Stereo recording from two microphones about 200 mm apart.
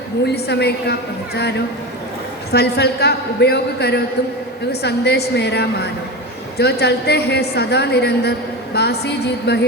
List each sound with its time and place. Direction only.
0.3 s a man's voice: 55° left (ahead or behind)